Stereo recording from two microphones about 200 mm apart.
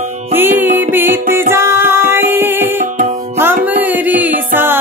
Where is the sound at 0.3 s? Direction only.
10° right (ahead or behind).